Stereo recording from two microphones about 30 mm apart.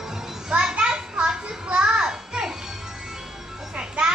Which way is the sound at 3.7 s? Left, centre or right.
Right.